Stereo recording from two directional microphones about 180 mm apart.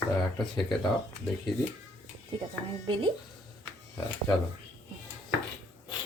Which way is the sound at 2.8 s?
25° right (ahead or behind).